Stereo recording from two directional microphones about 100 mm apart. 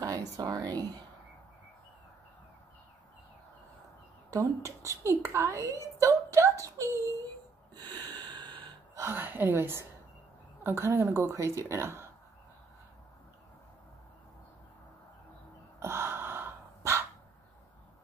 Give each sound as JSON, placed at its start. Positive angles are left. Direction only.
{"t": 0.0, "sound": "speech", "side_deg": -40}
{"t": 4.6, "sound": "a woman's voice", "side_deg": -30}
{"t": 5.9, "sound": "a sound", "side_deg": -30}
{"t": 7.9, "sound": "a sound", "side_deg": -45}
{"t": 8.9, "sound": "a woman's voice", "side_deg": -25}
{"t": 15.8, "sound": "gasp", "side_deg": -25}